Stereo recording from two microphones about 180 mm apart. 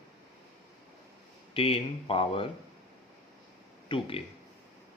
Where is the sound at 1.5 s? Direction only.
30° left (ahead or behind).